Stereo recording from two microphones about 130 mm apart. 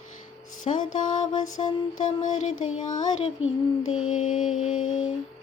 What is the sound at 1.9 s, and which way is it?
Mantra, 80° left.